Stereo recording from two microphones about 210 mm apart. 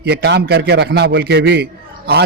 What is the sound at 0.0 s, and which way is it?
A man's voice, 50° right (ahead or behind).